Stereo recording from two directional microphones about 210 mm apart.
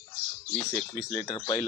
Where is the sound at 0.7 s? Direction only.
5° left (ahead or behind).